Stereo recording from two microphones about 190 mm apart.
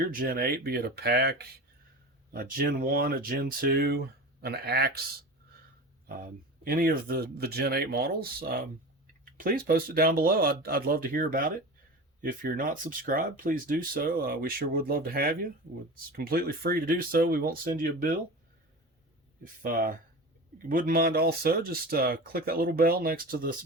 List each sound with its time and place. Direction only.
0.0 s speech: 50° right (ahead or behind)
6.1 s speech: 50° right (ahead or behind)
19.6 s speech: 45° right (ahead or behind)